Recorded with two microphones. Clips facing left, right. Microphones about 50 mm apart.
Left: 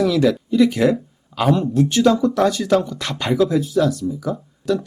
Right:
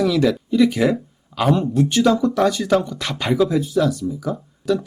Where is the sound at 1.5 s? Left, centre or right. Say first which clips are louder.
Even; centre.